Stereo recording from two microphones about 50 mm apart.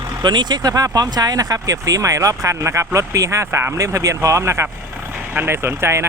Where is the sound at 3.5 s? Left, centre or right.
Right.